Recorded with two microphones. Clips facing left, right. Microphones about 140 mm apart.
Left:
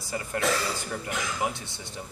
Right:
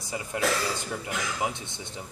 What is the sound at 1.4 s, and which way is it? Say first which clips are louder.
Speech: left 1 dB; 20° right (ahead or behind).